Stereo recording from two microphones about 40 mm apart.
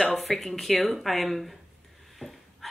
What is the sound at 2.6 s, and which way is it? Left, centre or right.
Dog, centre.